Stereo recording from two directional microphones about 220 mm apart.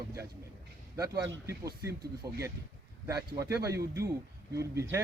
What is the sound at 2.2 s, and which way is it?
Speech, 15° right (ahead or behind).